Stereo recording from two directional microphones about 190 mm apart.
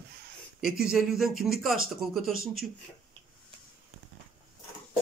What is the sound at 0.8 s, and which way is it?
Speech, centre (ahead or behind).